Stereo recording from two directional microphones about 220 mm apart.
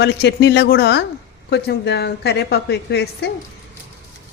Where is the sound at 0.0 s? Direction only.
50° left (ahead or behind).